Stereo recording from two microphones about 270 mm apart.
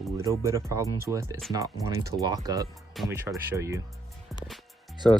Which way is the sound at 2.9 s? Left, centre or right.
Centre.